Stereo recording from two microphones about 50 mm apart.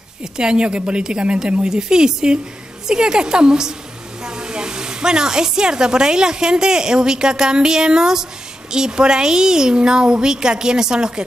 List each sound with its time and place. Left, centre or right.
0.2 s a woman's voice: centre